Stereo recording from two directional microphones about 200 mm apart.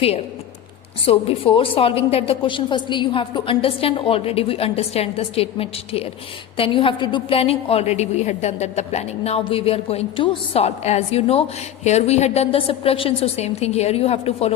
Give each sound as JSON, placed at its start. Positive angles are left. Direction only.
{"t": 1.0, "sound": "a woman's voice", "side_deg": 30}